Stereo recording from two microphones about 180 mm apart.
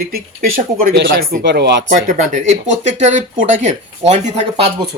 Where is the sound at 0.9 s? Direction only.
55° right (ahead or behind).